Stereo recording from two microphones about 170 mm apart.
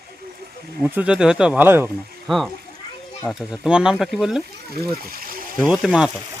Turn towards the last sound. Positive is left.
turn(degrees=-5)  # may be behind; listen again after turning